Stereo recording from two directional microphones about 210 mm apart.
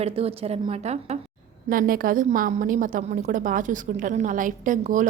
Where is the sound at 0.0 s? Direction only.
30° right (ahead or behind).